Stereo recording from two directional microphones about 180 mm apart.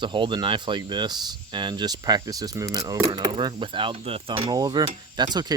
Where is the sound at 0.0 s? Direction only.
25° right (ahead or behind).